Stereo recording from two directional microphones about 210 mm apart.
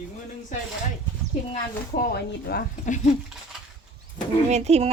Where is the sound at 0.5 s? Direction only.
35° left (ahead or behind).